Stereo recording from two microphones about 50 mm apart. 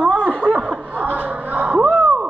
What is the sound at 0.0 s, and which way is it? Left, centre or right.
Chuckle, right.